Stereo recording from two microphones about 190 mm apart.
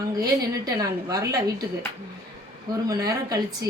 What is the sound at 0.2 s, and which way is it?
A woman's voice, 15° right (ahead or behind).